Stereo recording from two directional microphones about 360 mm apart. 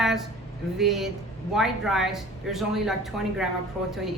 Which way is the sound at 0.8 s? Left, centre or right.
Centre.